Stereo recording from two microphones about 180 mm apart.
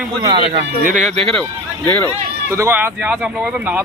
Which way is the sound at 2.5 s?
15° right (ahead or behind).